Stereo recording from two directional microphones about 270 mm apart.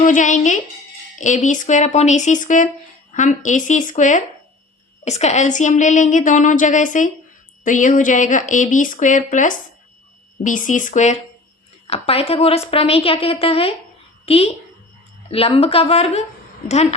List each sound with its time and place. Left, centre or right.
0.0 s a woman's voice: left